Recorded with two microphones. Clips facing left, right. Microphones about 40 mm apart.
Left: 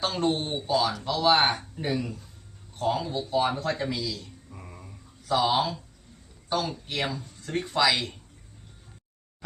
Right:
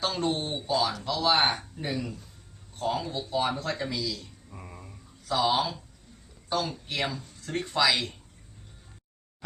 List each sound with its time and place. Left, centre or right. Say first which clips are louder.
0.0 s a man's voice: left 2 dB; centre
4.4 s a sound: even; centre
5.4 s speech: even; centre